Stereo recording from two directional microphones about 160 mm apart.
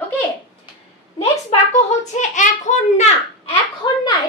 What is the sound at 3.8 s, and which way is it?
Speech, 25° left (ahead or behind).